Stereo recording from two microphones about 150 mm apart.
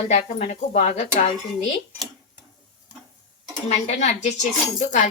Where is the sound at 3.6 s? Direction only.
50° left (ahead or behind).